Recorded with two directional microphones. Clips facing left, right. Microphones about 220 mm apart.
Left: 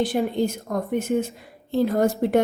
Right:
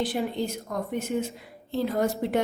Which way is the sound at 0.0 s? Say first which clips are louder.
Left 5 dB; 45° left (ahead or behind).